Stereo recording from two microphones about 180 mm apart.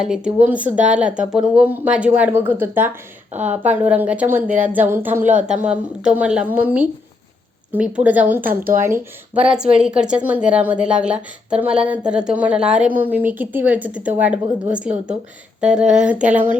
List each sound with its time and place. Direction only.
0.0 s speech: 5° right (ahead or behind)
8.4 s speech: 50° right (ahead or behind)
8.8 s a woman's voice: 10° right (ahead or behind)